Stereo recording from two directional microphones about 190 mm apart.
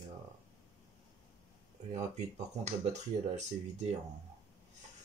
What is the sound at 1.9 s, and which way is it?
Speech, 40° right (ahead or behind).